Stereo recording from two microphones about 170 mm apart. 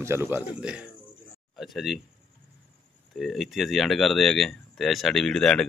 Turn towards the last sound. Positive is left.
turn(degrees=5)  # may be behind; listen again after turning